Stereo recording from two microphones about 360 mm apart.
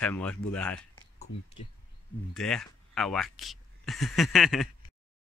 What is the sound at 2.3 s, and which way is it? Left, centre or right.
Speech, centre.